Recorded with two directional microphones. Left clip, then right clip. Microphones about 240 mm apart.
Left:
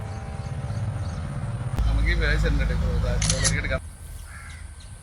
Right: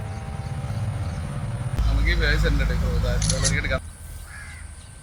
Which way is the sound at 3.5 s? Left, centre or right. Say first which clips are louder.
Right 2 dB; centre.